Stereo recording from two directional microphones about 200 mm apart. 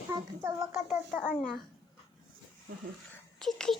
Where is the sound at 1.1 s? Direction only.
10° left (ahead or behind).